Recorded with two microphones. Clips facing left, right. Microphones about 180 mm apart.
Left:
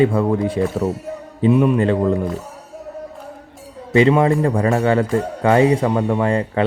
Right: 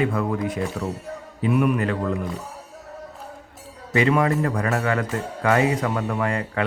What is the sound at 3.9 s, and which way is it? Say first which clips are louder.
Speech: left 6 dB; 30° left (ahead or behind).